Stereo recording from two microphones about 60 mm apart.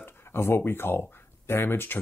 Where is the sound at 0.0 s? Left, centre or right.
Left.